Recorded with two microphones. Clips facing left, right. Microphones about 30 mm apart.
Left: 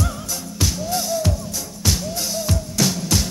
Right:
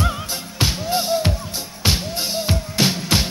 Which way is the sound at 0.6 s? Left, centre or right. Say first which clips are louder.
Right 3 dB; right.